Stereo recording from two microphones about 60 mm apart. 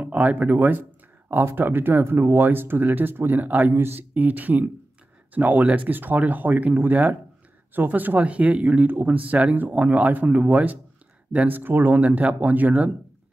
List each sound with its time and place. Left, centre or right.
0.0 s speech: right